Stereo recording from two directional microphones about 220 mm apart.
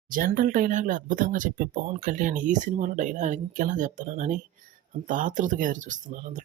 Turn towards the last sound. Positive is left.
turn(degrees=-35)  # may be behind; listen again after turning